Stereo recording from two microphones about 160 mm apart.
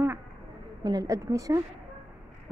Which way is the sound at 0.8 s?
25° right (ahead or behind).